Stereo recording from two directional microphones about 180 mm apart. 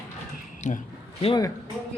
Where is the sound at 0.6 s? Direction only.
40° left (ahead or behind).